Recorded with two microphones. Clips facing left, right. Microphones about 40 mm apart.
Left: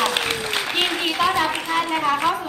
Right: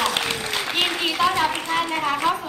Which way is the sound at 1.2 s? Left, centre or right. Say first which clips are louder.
Even; centre.